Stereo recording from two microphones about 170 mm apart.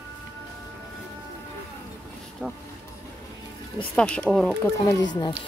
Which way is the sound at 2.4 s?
Centre (ahead or behind).